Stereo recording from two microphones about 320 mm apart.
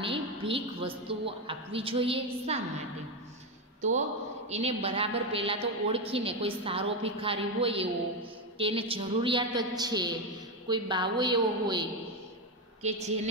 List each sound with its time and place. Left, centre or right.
0.0 s a woman's voice: centre
4.5 s a woman's voice: centre
12.8 s a woman's voice: right